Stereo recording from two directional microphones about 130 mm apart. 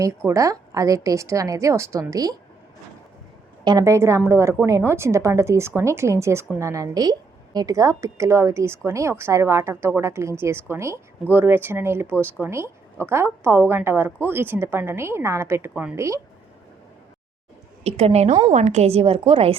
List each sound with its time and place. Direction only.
0.0 s a woman's voice: 20° right (ahead or behind)
3.6 s a woman's voice: 30° right (ahead or behind)
17.8 s a woman's voice: 55° right (ahead or behind)